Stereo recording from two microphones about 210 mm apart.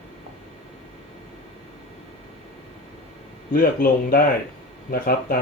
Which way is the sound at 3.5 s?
45° left (ahead or behind).